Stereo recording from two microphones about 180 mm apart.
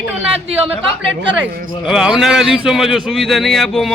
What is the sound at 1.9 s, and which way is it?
A man's voice, 5° right (ahead or behind).